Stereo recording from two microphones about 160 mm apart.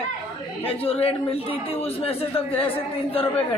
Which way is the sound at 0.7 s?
35° left (ahead or behind).